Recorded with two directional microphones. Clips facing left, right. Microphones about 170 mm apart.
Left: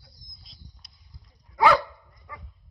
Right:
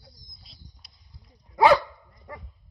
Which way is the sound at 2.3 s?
35° right (ahead or behind).